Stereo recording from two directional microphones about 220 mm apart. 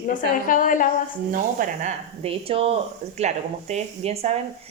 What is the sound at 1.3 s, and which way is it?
A woman's voice, 35° right (ahead or behind).